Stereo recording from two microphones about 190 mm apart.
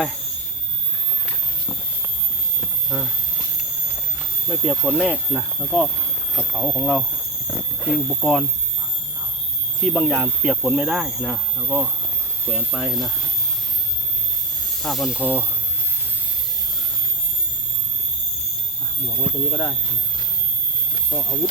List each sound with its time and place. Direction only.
2.9 s speech: centre (ahead or behind)
4.4 s speech: centre (ahead or behind)
9.8 s speech: 5° right (ahead or behind)
14.8 s speech: centre (ahead or behind)
19.2 s speech: 10° left (ahead or behind)